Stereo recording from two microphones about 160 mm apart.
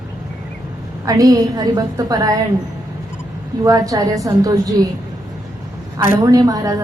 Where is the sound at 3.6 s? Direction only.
20° right (ahead or behind).